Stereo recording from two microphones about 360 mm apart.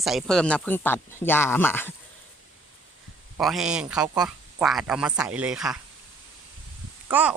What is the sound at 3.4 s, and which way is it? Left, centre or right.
Speech, centre.